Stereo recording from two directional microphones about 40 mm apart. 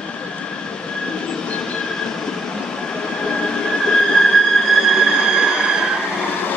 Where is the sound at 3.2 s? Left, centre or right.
Left.